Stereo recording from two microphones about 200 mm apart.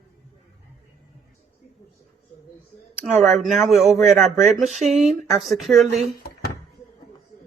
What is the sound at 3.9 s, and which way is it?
Speech, 35° right (ahead or behind).